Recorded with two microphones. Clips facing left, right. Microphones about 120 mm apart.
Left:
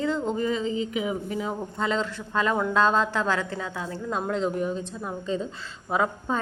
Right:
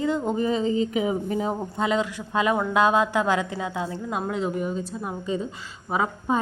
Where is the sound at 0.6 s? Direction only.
35° right (ahead or behind).